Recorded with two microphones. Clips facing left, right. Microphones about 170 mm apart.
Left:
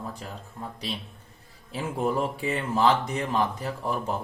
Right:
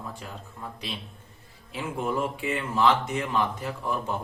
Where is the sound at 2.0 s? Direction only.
35° left (ahead or behind).